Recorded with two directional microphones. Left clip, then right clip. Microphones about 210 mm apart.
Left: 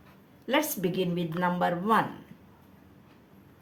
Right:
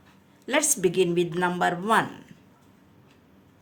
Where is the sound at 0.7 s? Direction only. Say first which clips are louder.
Right 8 dB; 30° right (ahead or behind).